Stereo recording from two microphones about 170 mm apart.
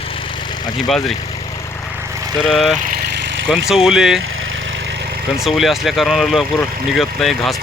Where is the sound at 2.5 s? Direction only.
Centre (ahead or behind).